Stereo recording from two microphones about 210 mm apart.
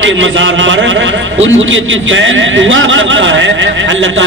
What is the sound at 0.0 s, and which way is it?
A man's voice, 65° right (ahead or behind).